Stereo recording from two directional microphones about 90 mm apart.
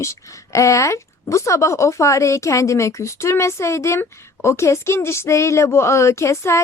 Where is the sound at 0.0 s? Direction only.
35° left (ahead or behind).